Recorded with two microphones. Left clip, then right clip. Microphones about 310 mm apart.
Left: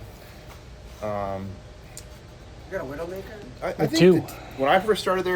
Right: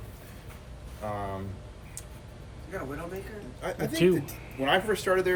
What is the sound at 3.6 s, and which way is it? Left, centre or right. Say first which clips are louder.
Speech: left 7 dB; centre.